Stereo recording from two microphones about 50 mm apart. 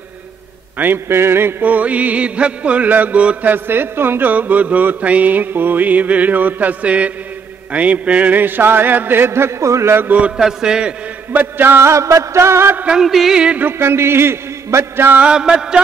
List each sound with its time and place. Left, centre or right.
0.7 s mantra: right
1.0 s a man's voice: right
1.6 s mantra: right
3.4 s speech: right
4.3 s mantra: right
10.3 s a man's voice: centre
11.3 s speech: right
11.8 s music: right
12.9 s music: centre
13.7 s a man's voice: right
15.3 s a man's voice: centre